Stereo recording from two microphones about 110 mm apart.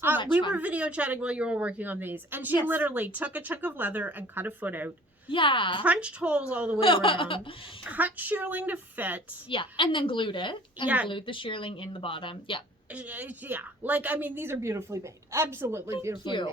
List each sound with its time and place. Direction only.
0.5 s speech: 15° right (ahead or behind)
5.3 s speech: 50° left (ahead or behind)
5.8 s speech: 10° right (ahead or behind)
6.7 s speech: 50° left (ahead or behind)
7.9 s speech: 15° right (ahead or behind)
9.5 s speech: 50° left (ahead or behind)
10.8 s speech: 10° right (ahead or behind)
11.1 s speech: 50° left (ahead or behind)
12.9 s a woman's voice: 15° right (ahead or behind)
16.2 s speech: 45° left (ahead or behind)